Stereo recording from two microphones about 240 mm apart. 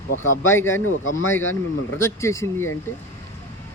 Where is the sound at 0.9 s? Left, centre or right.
Left.